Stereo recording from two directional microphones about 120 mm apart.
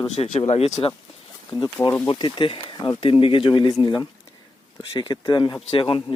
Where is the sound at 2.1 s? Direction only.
45° left (ahead or behind).